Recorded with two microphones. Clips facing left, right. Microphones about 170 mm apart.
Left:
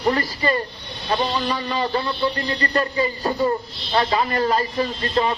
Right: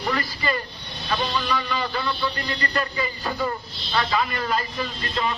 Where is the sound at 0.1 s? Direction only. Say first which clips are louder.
Left 5 dB; 35° left (ahead or behind).